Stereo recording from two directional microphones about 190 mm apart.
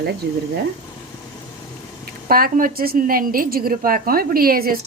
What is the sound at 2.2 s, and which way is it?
A woman's voice, 50° right (ahead or behind).